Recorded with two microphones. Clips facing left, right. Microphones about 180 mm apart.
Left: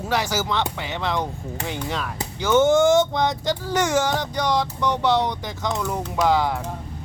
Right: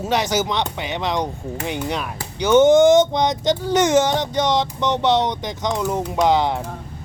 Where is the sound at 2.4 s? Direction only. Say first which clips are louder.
Right 5 dB; 20° right (ahead or behind).